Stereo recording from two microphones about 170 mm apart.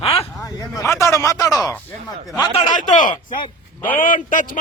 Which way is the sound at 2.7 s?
50° left (ahead or behind).